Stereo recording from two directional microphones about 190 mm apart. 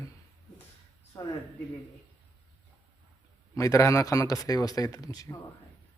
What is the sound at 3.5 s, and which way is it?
Speech, 15° left (ahead or behind).